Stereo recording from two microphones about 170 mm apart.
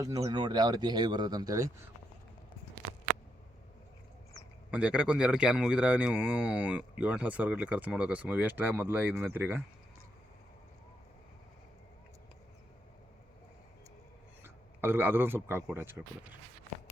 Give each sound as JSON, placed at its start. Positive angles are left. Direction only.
{"t": 0.0, "sound": "speech", "side_deg": -20}
{"t": 4.7, "sound": "speech", "side_deg": -10}
{"t": 14.4, "sound": "a man's voice", "side_deg": -10}